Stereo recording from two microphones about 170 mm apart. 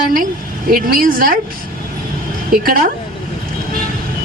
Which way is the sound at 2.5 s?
60° right (ahead or behind).